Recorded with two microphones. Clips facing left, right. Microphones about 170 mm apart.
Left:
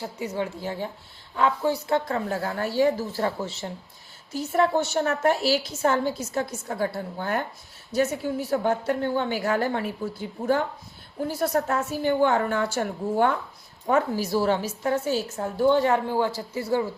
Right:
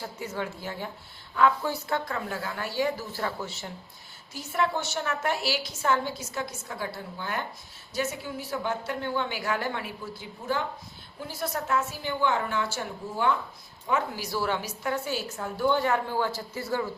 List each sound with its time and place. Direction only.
0.0 s a woman's voice: 20° left (ahead or behind)
0.6 s a woman's voice: 30° left (ahead or behind)
2.0 s a woman's voice: 35° left (ahead or behind)